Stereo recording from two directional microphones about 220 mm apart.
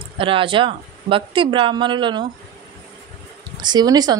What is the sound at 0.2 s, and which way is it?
A woman's voice, 25° right (ahead or behind).